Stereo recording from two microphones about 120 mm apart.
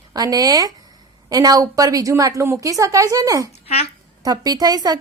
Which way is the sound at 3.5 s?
60° left (ahead or behind).